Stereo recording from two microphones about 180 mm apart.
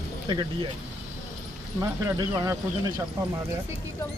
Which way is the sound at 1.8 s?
20° right (ahead or behind).